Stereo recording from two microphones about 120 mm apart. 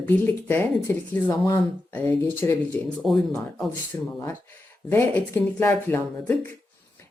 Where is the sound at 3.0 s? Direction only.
Centre (ahead or behind).